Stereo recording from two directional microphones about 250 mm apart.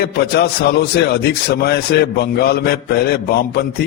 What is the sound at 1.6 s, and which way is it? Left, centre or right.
A man's voice, left.